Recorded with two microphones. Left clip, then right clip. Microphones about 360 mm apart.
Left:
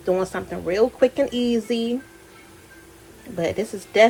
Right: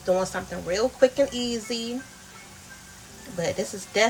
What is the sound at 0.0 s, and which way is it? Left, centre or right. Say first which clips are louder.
Speech: left 2 dB; centre.